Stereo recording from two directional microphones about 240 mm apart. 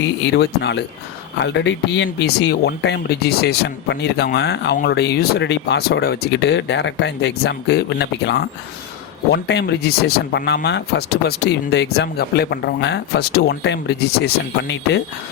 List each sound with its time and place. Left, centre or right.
0.3 s speech: left